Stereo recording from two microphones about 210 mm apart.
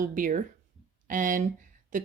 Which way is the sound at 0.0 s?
40° right (ahead or behind).